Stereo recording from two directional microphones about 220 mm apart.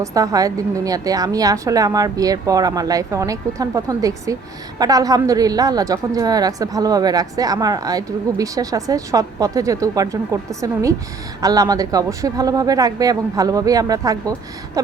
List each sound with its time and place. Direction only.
0.0 s a woman's voice: 15° right (ahead or behind)